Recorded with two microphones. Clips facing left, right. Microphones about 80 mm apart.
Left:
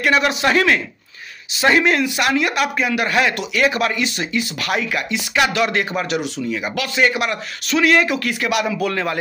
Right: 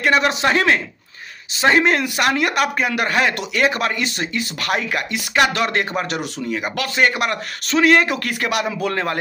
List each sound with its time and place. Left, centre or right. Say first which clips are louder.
0.0 s speech: even; right